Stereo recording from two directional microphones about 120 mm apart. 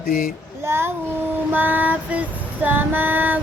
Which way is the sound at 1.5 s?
15° right (ahead or behind).